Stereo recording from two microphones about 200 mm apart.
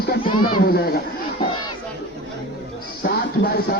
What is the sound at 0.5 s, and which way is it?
Speech, 50° left (ahead or behind).